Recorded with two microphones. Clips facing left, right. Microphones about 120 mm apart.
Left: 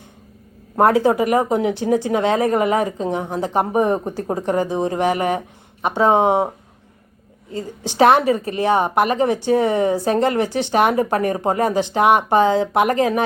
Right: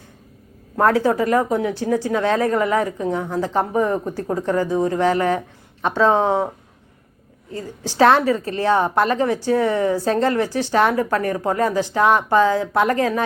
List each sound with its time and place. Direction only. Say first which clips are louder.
0.8 s a woman's voice: left 2 dB; 20° left (ahead or behind)
7.5 s a woman's voice: left 2 dB; 20° left (ahead or behind)